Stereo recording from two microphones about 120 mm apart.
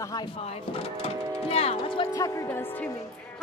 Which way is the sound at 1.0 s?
55° left (ahead or behind).